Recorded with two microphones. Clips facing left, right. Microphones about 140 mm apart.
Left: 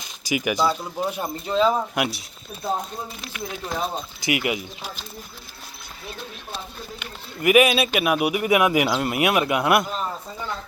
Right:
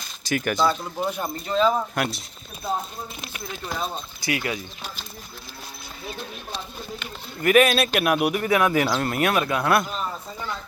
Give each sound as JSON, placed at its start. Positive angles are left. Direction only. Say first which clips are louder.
{"t": 0.0, "sound": "a man's voice", "louder": "left 1 dB", "side_deg": 10}
{"t": 3.8, "sound": "a man's voice", "louder": "left 3 dB", "side_deg": 20}
{"t": 7.0, "sound": "a man's voice", "louder": "left 2 dB", "side_deg": 10}